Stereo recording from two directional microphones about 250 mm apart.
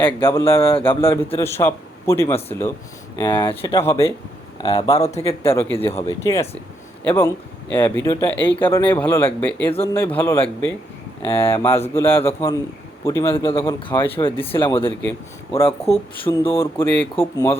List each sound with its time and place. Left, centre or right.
0.0 s speech: centre
0.6 s speech: left
0.9 s speech: centre
4.6 s speech: left
6.1 s speech: centre
8.6 s speech: centre
14.3 s speech: left
14.5 s speech: centre
15.9 s speech: left
16.6 s speech: centre